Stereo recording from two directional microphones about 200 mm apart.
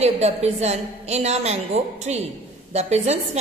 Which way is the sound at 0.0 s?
35° right (ahead or behind).